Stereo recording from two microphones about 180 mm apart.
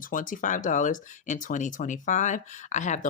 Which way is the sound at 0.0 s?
50° left (ahead or behind).